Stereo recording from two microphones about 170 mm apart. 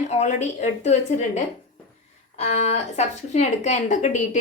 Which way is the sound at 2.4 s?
40° left (ahead or behind).